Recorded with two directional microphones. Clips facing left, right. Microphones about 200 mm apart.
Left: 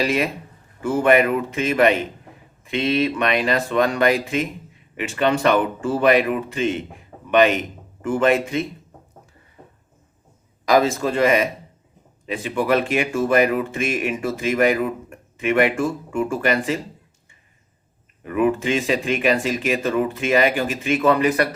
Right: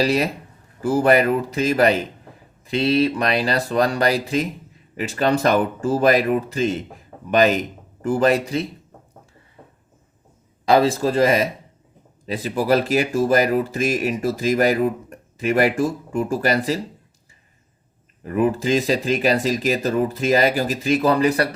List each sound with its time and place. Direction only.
0.0 s speech: 35° right (ahead or behind)
10.7 s speech: 35° right (ahead or behind)
18.3 s speech: 35° right (ahead or behind)